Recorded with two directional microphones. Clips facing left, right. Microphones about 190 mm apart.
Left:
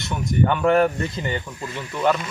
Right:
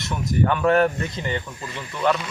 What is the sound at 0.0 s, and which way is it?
Speech, centre (ahead or behind).